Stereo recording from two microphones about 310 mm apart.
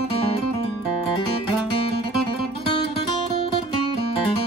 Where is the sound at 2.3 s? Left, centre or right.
Centre.